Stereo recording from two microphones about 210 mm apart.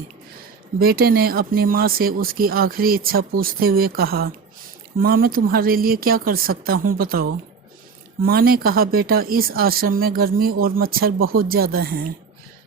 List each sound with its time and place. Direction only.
0.8 s speech: 45° right (ahead or behind)